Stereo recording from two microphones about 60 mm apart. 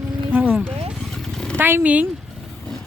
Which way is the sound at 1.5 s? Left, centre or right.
Right.